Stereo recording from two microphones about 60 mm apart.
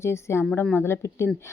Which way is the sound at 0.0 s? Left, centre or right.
Left.